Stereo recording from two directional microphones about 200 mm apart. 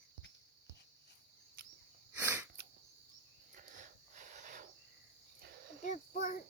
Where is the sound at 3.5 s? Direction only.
40° right (ahead or behind).